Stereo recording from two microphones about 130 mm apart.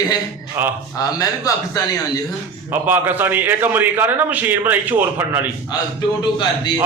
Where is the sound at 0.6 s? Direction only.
20° right (ahead or behind).